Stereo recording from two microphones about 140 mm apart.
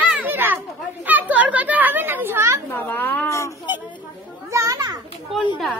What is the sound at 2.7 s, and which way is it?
Speech, 15° left (ahead or behind).